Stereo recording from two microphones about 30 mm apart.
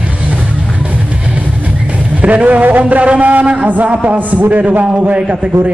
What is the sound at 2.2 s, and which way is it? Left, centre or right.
A man's voice, right.